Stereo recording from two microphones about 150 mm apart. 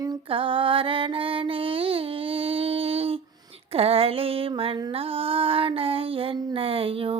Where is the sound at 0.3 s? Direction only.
35° right (ahead or behind).